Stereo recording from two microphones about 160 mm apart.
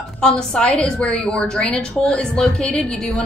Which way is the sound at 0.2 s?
5° left (ahead or behind).